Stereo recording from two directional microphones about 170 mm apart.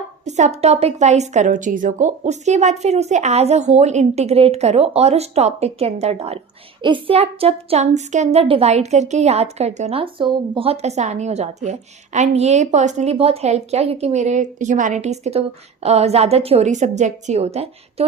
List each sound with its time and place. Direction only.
0.3 s a woman's voice: 45° right (ahead or behind)